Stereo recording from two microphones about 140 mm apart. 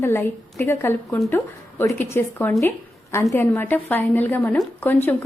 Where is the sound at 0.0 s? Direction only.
15° left (ahead or behind).